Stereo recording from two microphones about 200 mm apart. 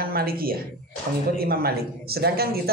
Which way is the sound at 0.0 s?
50° right (ahead or behind).